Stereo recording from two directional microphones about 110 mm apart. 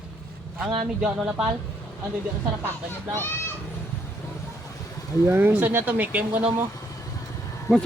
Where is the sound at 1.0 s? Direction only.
5° right (ahead or behind).